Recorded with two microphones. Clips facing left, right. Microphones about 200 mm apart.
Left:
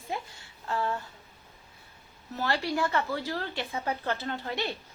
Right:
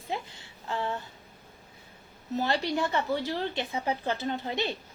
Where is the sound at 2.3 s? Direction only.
20° right (ahead or behind).